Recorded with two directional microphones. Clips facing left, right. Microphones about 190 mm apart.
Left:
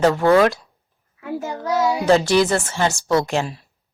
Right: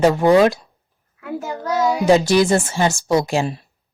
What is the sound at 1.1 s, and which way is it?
Speech, centre (ahead or behind).